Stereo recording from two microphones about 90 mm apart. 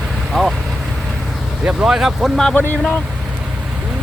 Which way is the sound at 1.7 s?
10° right (ahead or behind).